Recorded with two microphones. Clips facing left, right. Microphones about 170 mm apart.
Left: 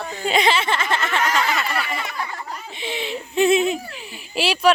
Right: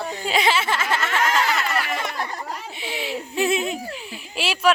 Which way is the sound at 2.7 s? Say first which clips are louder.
Left 2 dB; 5° right (ahead or behind).